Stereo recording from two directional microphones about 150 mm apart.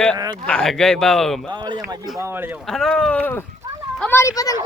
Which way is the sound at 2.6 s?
Centre (ahead or behind).